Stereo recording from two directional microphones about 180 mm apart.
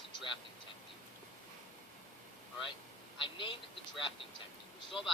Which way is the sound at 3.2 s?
25° left (ahead or behind).